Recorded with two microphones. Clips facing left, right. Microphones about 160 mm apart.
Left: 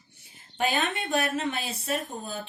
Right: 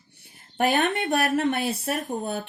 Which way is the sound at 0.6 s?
65° right (ahead or behind).